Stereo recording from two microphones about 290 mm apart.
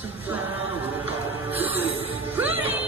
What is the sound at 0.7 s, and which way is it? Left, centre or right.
Music, centre.